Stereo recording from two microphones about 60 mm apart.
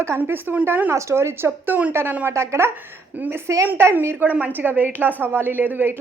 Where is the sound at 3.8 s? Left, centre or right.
Right.